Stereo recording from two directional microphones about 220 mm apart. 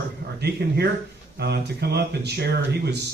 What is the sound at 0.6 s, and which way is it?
A man's voice, 50° right (ahead or behind).